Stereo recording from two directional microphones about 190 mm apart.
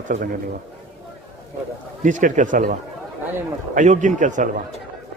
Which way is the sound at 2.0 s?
45° right (ahead or behind).